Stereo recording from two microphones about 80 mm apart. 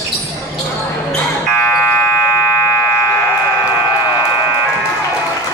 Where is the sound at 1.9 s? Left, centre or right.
Left.